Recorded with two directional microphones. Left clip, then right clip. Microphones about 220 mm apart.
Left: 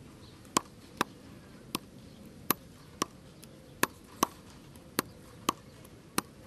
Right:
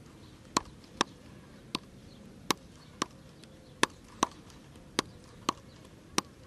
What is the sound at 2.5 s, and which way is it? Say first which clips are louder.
Chop: right 2 dB; 15° right (ahead or behind).